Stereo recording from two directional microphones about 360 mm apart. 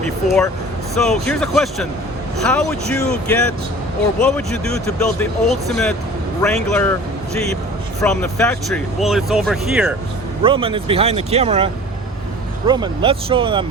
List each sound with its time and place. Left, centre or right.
0.9 s speech: centre
8.0 s speech: centre
10.4 s speech: centre